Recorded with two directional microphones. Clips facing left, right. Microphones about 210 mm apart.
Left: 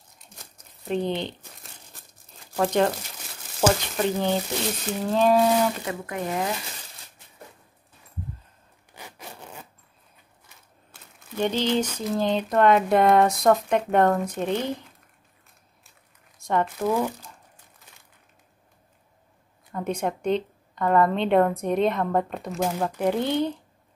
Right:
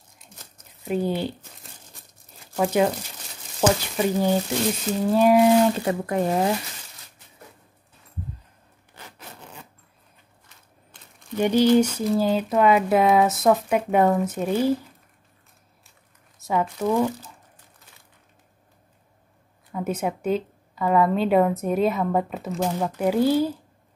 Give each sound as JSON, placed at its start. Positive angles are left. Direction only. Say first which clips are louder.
{"t": 0.8, "sound": "speech", "louder": "right 2 dB", "side_deg": -5}
{"t": 2.5, "sound": "speech", "louder": "right 1 dB", "side_deg": -5}
{"t": 5.9, "sound": "speech", "louder": "right 7 dB", "side_deg": -35}
{"t": 8.9, "sound": "sawing", "louder": "left 2 dB", "side_deg": 10}
{"t": 10.9, "sound": "crumpling", "louder": "left 1 dB", "side_deg": 5}
{"t": 11.3, "sound": "a woman's voice", "louder": "right 6 dB", "side_deg": -10}
{"t": 16.3, "sound": "crumpling", "louder": "even", "side_deg": -5}
{"t": 16.6, "sound": "a woman's voice", "louder": "right 2 dB", "side_deg": 5}
{"t": 19.7, "sound": "a woman's voice", "louder": "right 1 dB", "side_deg": -5}